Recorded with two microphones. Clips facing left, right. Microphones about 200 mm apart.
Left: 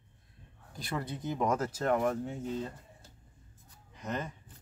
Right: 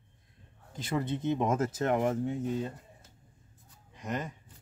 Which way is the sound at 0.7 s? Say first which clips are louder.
Right 5 dB; 20° right (ahead or behind).